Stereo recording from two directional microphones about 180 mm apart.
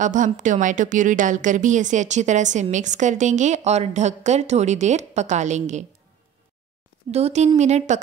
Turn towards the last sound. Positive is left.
turn(degrees=-40)  # may be behind; listen again after turning